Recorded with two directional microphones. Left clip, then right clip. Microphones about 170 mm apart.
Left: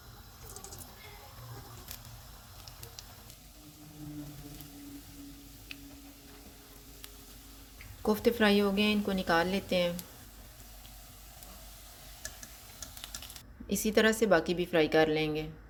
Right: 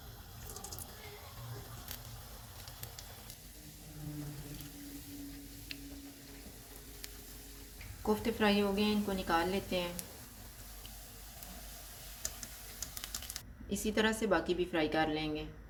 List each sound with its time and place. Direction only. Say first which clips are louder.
8.0 s a woman's voice: left 5 dB; 50° left (ahead or behind)
13.7 s a woman's voice: left 6 dB; 45° left (ahead or behind)